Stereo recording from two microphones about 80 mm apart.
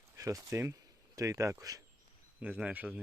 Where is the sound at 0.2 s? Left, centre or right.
Right.